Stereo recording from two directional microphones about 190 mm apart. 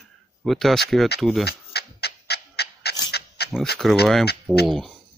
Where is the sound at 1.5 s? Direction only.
60° left (ahead or behind).